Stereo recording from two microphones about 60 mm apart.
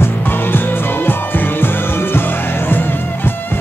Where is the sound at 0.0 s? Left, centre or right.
Left.